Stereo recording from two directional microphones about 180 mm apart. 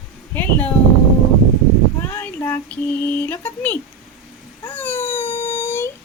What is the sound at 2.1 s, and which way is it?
Speech, 10° left (ahead or behind).